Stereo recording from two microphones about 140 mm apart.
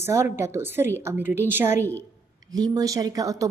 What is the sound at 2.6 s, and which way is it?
Speech, 25° right (ahead or behind).